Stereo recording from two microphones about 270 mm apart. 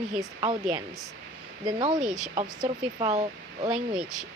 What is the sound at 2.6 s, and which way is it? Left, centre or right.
Speech, right.